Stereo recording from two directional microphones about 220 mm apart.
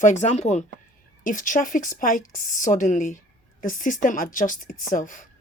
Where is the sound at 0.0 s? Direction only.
35° left (ahead or behind).